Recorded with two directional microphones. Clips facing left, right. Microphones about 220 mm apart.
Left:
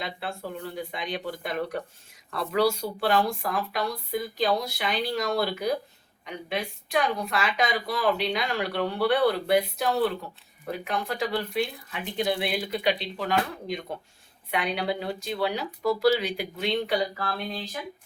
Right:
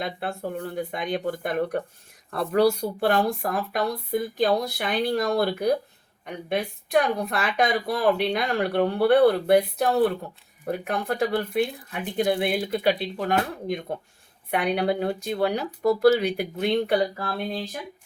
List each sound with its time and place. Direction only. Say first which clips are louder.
0.0 s speech: right 4 dB; 50° right (ahead or behind)